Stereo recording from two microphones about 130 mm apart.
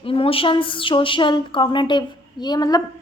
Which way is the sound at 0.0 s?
45° left (ahead or behind).